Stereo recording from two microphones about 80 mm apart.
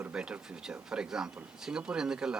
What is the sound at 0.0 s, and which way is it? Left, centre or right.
Speech, centre.